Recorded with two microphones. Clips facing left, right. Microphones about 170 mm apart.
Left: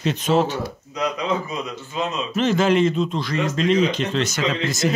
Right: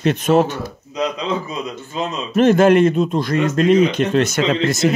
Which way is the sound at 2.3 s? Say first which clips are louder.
Right 7 dB; 55° right (ahead or behind).